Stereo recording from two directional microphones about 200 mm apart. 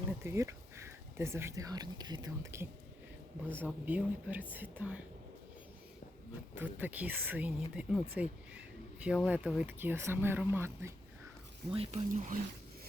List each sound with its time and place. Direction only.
0.2 s speech: 15° right (ahead or behind)
6.5 s speech: 10° right (ahead or behind)
11.7 s speech: 30° right (ahead or behind)